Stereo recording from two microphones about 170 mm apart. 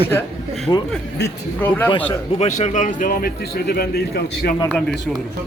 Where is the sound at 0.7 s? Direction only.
25° left (ahead or behind).